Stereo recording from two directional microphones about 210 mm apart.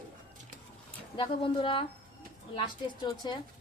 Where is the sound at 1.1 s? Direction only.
25° left (ahead or behind).